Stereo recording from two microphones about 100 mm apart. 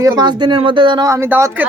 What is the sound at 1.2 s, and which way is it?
Speech, 20° right (ahead or behind).